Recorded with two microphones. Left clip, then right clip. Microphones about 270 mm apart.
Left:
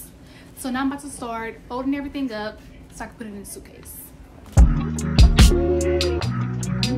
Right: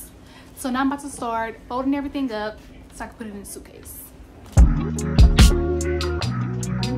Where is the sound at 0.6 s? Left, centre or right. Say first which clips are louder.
Right 2 dB; centre.